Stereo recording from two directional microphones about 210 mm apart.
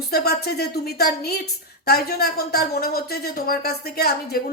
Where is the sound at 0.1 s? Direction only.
45° left (ahead or behind).